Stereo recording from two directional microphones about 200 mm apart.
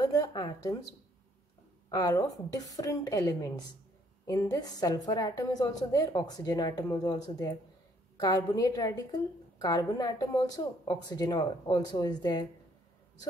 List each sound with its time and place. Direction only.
0.0 s a woman's voice: 20° left (ahead or behind)
1.9 s a woman's voice: 15° left (ahead or behind)